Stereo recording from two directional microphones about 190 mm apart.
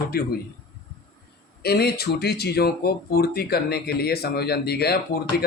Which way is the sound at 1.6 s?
55° left (ahead or behind).